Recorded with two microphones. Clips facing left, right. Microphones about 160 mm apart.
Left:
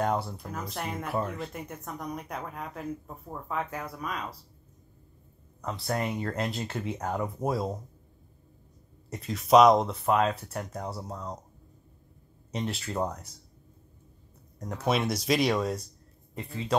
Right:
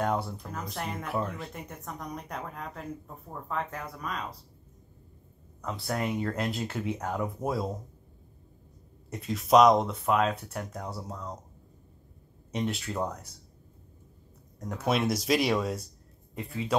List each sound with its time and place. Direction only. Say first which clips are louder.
0.2 s speech: even; 5° left (ahead or behind)
5.7 s speech: even; centre (ahead or behind)
9.1 s speech: left 1 dB; centre (ahead or behind)
12.5 s speech: right 2 dB; centre (ahead or behind)
12.9 s speech: left 1 dB; 20° left (ahead or behind)
14.7 s speech: even; centre (ahead or behind)